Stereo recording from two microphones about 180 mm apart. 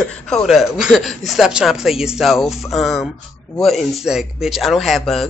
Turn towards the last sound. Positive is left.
turn(degrees=0)  # may be behind; listen again after turning